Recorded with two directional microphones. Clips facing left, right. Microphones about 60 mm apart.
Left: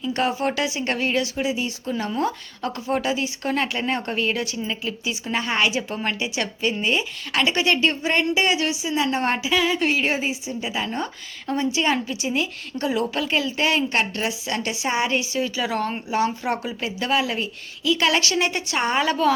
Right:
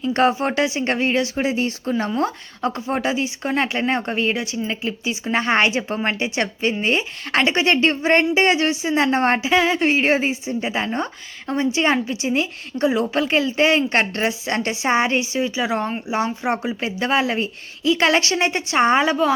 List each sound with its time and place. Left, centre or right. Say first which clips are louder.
0.0 s a woman's voice: right 5 dB; right
1.4 s a woman's voice: right 4 dB; right; by 19.3 s centre